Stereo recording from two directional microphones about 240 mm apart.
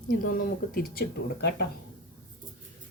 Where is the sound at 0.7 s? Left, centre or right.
Left.